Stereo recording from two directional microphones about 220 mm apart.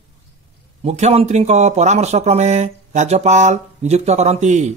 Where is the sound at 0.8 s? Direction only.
30° right (ahead or behind).